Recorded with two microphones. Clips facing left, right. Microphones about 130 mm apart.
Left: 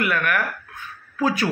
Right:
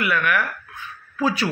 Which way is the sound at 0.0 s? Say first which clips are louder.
Even; 45° left (ahead or behind).